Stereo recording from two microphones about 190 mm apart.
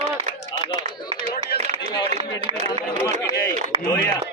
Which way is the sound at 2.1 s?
35° right (ahead or behind).